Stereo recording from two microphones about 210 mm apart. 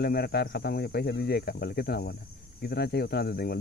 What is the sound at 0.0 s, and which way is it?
Speech, 50° left (ahead or behind).